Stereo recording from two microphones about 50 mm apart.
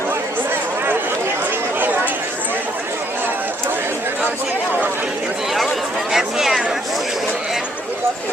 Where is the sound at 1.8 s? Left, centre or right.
Right.